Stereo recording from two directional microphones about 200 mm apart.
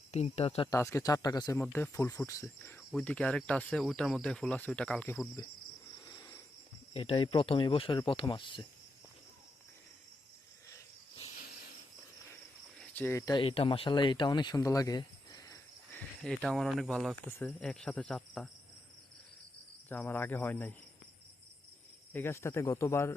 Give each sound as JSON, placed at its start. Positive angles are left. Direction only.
{"t": 0.1, "sound": "speech", "side_deg": 30}
{"t": 0.7, "sound": "speech", "side_deg": 15}
{"t": 1.5, "sound": "speech", "side_deg": 5}
{"t": 6.1, "sound": "a sound", "side_deg": 15}
{"t": 6.9, "sound": "speech", "side_deg": 30}
{"t": 12.8, "sound": "speech", "side_deg": 10}
{"t": 16.2, "sound": "speech", "side_deg": 0}
{"t": 17.2, "sound": "speech", "side_deg": 10}
{"t": 19.9, "sound": "speech", "side_deg": 10}
{"t": 22.1, "sound": "speech", "side_deg": 10}